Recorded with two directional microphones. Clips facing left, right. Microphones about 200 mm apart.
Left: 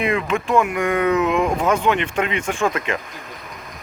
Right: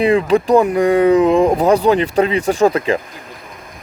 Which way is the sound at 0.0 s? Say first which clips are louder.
Right 8 dB; 35° right (ahead or behind).